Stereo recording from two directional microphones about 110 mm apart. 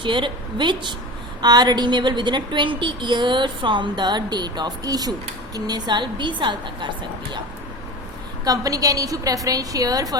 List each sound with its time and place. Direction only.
0.0 s a woman's voice: 45° right (ahead or behind)
8.4 s a woman's voice: 35° right (ahead or behind)